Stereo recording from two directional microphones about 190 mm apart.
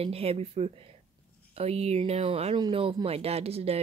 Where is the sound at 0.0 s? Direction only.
30° right (ahead or behind).